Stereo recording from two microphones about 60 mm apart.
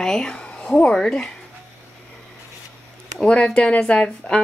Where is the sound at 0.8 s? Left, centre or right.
Centre.